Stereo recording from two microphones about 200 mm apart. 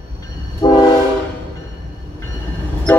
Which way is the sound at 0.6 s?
20° left (ahead or behind).